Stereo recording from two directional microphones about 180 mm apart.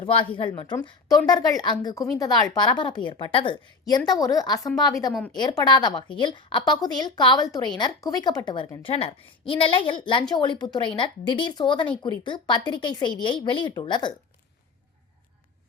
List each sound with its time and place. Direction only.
0.0 s a woman's voice: 30° left (ahead or behind)
5.1 s a woman's voice: centre (ahead or behind)
5.5 s a woman's voice: 25° left (ahead or behind)